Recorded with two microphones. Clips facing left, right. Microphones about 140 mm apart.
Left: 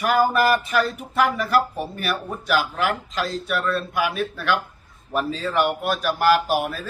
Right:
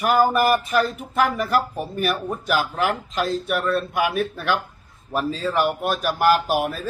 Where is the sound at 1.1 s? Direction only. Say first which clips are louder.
Even; 45° right (ahead or behind).